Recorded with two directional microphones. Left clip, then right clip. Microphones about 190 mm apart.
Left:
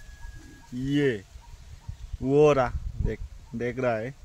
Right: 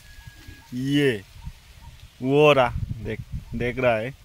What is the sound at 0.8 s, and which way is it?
Speech, 40° right (ahead or behind).